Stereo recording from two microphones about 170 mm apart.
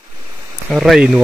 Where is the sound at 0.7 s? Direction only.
Centre (ahead or behind).